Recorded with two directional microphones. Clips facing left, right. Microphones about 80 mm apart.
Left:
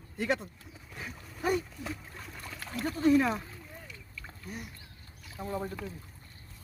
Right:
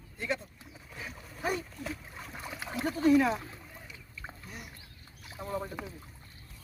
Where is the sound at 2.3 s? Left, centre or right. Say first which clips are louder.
Right 3 dB; centre.